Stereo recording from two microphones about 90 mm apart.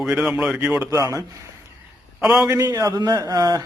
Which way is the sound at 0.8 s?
35° right (ahead or behind).